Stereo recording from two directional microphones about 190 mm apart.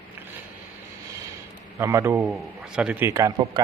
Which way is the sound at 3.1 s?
20° right (ahead or behind).